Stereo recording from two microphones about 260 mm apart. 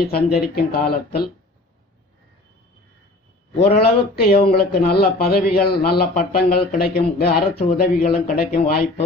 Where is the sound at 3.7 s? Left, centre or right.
Left.